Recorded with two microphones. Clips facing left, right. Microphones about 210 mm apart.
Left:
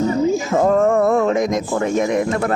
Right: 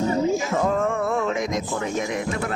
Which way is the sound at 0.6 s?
45° left (ahead or behind).